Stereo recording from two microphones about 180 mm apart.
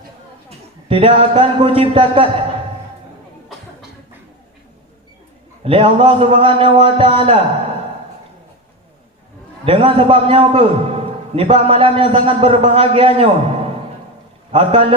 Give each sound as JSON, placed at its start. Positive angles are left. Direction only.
{"t": 0.9, "sound": "a man's voice", "side_deg": -30}
{"t": 5.6, "sound": "a man's voice", "side_deg": -30}
{"t": 9.6, "sound": "a man's voice", "side_deg": -30}
{"t": 14.5, "sound": "a man's voice", "side_deg": -30}